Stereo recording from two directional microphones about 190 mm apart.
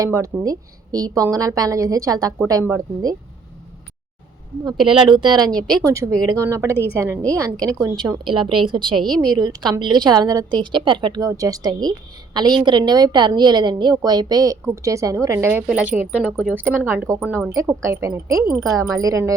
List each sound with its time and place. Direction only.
0.0 s a woman's voice: 15° right (ahead or behind)
4.9 s a woman's voice: 25° right (ahead or behind)